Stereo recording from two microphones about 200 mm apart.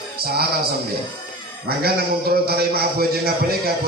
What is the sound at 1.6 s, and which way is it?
A man's voice, 50° right (ahead or behind).